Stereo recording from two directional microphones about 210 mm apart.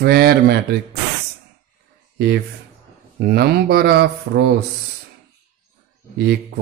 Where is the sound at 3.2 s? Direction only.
50° right (ahead or behind).